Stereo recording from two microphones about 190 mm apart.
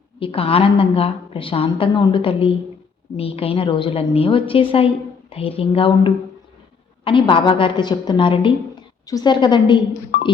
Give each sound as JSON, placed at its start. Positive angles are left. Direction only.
{"t": 0.2, "sound": "a woman's voice", "side_deg": 30}